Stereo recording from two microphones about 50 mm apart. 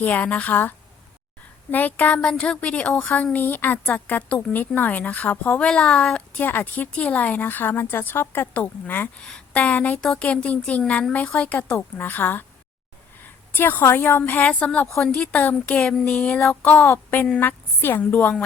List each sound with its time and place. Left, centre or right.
0.0 s a woman's voice: left
2.4 s a woman's voice: left
3.3 s a woman's voice: left
3.8 s a woman's voice: left
5.6 s a woman's voice: centre
6.3 s a woman's voice: left
8.5 s a woman's voice: left
13.2 s a sound: left
14.0 s a woman's voice: left
16.9 s a woman's voice: left
17.7 s a woman's voice: left
18.1 s a woman's voice: left